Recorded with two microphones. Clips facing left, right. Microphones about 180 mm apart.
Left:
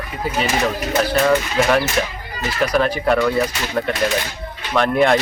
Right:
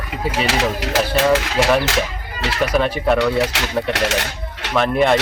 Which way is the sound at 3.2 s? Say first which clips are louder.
Even; 80° right.